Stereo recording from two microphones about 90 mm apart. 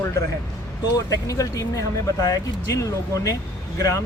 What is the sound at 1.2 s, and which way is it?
Speech, 35° left (ahead or behind).